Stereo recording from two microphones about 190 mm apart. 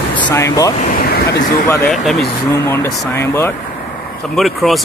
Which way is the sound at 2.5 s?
10° left (ahead or behind).